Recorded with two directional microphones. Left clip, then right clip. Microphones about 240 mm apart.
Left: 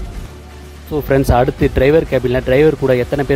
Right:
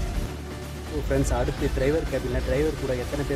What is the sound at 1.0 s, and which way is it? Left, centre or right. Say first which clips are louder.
Speech: left 13 dB; left.